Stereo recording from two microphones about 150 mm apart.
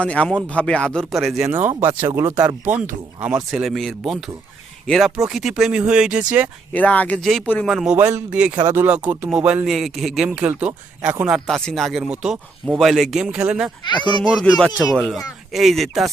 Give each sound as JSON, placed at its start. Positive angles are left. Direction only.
{"t": 0.0, "sound": "speech", "side_deg": 5}
{"t": 1.5, "sound": "speech", "side_deg": -15}
{"t": 3.5, "sound": "speech", "side_deg": 0}
{"t": 6.7, "sound": "speech", "side_deg": 10}
{"t": 7.4, "sound": "speech", "side_deg": 10}
{"t": 7.7, "sound": "speech", "side_deg": -5}
{"t": 11.4, "sound": "speech", "side_deg": 0}